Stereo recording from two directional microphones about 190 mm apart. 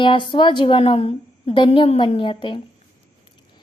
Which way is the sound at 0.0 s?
25° left (ahead or behind).